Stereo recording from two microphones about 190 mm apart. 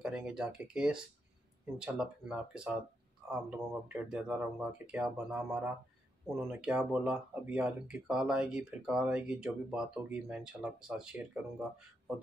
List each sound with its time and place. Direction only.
0.0 s speech: 5° right (ahead or behind)